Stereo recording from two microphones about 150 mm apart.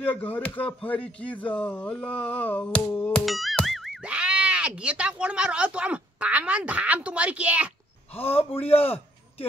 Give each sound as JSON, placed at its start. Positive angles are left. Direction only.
{"t": 0.0, "sound": "speech", "side_deg": 10}
{"t": 3.3, "sound": "speech", "side_deg": 0}
{"t": 8.2, "sound": "a man's voice", "side_deg": 40}